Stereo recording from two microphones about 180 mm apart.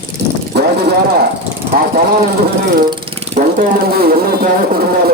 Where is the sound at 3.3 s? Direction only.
50° right (ahead or behind).